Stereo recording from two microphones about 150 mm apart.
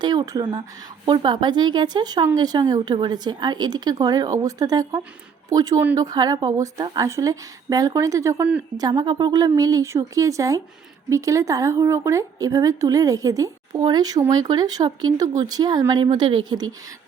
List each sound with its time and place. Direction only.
0.0 s a woman's voice: 30° right (ahead or behind)